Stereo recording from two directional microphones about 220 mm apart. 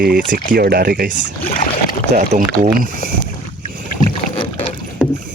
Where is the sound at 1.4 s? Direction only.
40° left (ahead or behind).